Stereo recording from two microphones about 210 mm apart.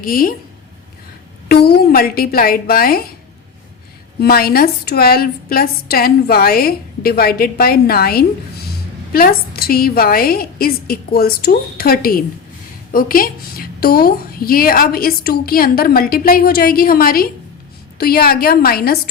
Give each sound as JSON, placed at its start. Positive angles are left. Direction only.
{"t": 0.0, "sound": "a woman's voice", "side_deg": 45}
{"t": 1.5, "sound": "a woman's voice", "side_deg": 50}
{"t": 4.2, "sound": "a woman's voice", "side_deg": 45}